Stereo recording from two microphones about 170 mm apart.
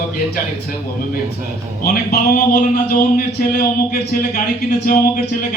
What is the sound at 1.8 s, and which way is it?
A man's voice, 60° left (ahead or behind).